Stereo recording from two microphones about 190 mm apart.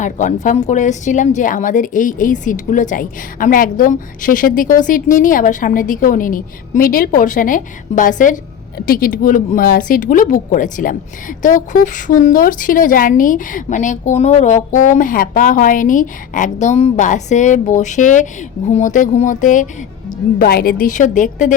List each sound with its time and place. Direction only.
0.0 s a woman's voice: 40° left (ahead or behind)